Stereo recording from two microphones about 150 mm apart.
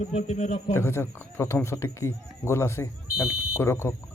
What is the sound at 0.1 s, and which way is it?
Speech, 45° left (ahead or behind).